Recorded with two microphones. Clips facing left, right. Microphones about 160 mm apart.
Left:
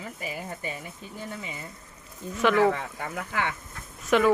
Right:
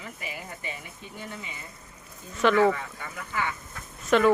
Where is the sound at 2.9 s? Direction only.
60° left (ahead or behind).